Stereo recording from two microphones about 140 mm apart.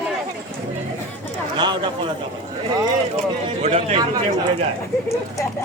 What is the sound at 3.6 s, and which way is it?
Speech, 50° right (ahead or behind).